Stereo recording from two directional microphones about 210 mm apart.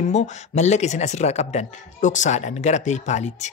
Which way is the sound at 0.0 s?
35° left (ahead or behind).